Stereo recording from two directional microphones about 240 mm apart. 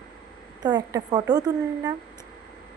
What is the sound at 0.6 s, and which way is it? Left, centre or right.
Speech, centre.